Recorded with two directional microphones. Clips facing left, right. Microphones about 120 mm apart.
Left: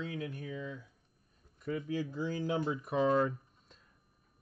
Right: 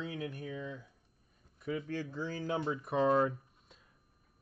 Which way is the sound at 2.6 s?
Centre (ahead or behind).